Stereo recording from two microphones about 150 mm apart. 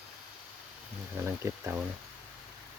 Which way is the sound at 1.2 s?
20° right (ahead or behind).